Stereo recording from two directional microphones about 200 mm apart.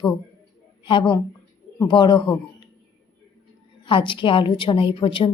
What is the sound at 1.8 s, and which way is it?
Speech, 20° left (ahead or behind).